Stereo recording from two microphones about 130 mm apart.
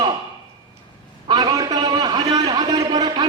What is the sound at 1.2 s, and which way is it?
A man's voice, 30° right (ahead or behind).